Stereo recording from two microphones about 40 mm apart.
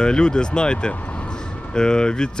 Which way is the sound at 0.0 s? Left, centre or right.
Left.